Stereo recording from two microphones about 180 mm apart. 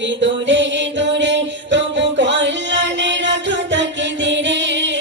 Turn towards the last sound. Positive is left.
turn(degrees=-80)